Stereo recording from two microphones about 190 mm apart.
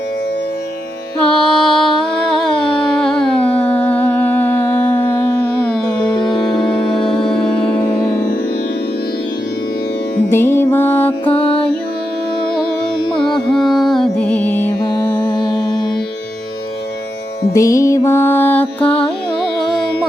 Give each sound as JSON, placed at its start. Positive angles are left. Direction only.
{"t": 1.2, "sound": "music", "side_deg": 5}
{"t": 10.2, "sound": "music", "side_deg": 10}
{"t": 11.3, "sound": "music", "side_deg": 30}
{"t": 13.5, "sound": "music", "side_deg": 0}
{"t": 17.5, "sound": "music", "side_deg": 15}